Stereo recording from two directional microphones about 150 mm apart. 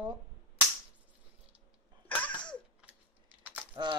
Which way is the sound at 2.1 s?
10° left (ahead or behind).